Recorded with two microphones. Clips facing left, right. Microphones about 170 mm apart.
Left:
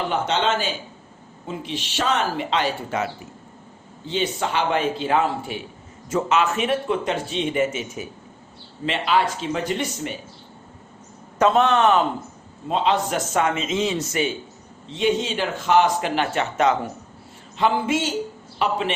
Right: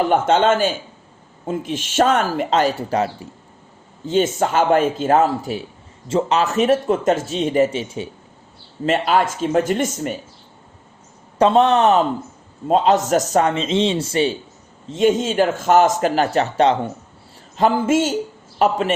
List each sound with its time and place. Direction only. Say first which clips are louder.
0.1 s a man's voice: right 5 dB; 50° right (ahead or behind)
4.0 s a man's voice: right 7 dB; 45° right (ahead or behind); by 8.1 s 30° right (ahead or behind)
8.9 s a man's voice: right 4 dB; 45° right (ahead or behind)
11.3 s a man's voice: right 4 dB; 30° right (ahead or behind)
12.6 s a man's voice: right 6 dB; 45° right (ahead or behind)
14.8 s a man's voice: right 5 dB; 45° right (ahead or behind)
17.6 s a man's voice: right 5 dB; 40° right (ahead or behind)